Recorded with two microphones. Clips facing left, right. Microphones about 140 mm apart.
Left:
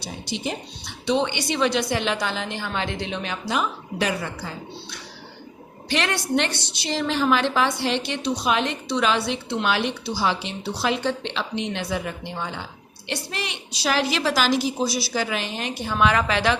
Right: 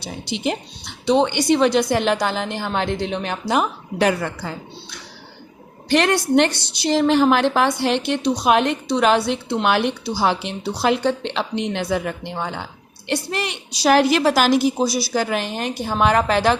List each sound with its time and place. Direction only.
0.3 s a woman's voice: 65° right (ahead or behind)
1.0 s a woman's voice: 40° right (ahead or behind)
5.9 s a woman's voice: 50° right (ahead or behind)